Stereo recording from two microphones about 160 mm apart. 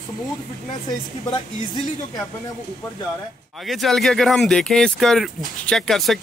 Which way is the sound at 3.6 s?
Centre (ahead or behind).